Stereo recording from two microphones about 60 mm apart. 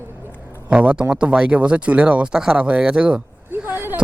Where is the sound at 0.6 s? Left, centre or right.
Centre.